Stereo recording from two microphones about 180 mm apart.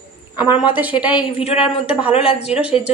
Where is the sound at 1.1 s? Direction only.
30° left (ahead or behind).